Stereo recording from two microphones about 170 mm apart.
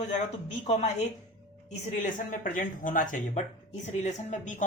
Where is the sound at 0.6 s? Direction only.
40° left (ahead or behind).